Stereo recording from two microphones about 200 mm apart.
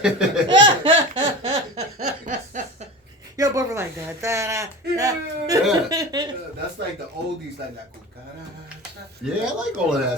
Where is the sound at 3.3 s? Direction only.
15° right (ahead or behind).